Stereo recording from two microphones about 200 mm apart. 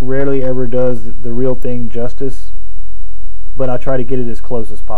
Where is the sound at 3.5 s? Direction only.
15° left (ahead or behind).